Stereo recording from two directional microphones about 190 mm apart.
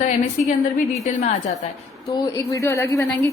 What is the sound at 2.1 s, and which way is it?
Speech, 15° left (ahead or behind).